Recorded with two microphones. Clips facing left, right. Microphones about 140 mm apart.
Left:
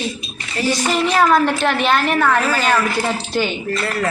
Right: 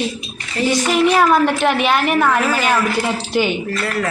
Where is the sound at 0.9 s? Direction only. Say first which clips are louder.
Right 1 dB; 10° right (ahead or behind).